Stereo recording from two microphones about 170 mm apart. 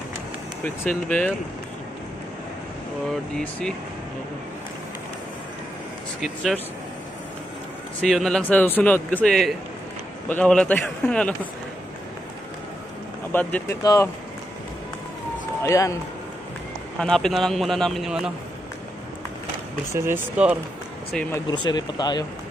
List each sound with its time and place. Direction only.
0.8 s a man's voice: 5° left (ahead or behind)
3.3 s speech: 5° left (ahead or behind)
6.2 s speech: centre (ahead or behind)
8.0 s a man's voice: centre (ahead or behind)
13.3 s a man's voice: 10° left (ahead or behind)
15.6 s speech: 20° left (ahead or behind)
17.0 s speech: 5° left (ahead or behind)
19.9 s speech: 15° right (ahead or behind)
21.1 s a man's voice: 5° left (ahead or behind)
21.5 s speech: 25° left (ahead or behind)